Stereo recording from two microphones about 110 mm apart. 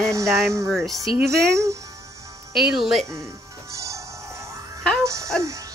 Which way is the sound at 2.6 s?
Centre (ahead or behind).